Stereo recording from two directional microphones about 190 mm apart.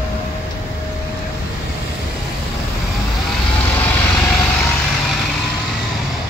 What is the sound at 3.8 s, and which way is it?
Vehicle, 10° left (ahead or behind).